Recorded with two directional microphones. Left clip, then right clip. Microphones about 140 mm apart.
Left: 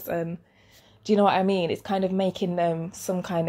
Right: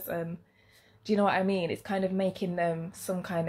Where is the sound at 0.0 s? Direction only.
20° left (ahead or behind).